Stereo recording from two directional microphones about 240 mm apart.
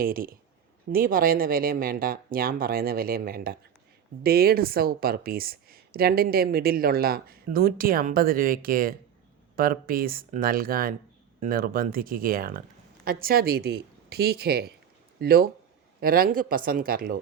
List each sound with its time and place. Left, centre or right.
0.0 s speech: right